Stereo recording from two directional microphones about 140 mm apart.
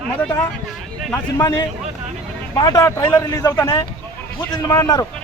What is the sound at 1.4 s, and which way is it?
A man's voice, 30° left (ahead or behind).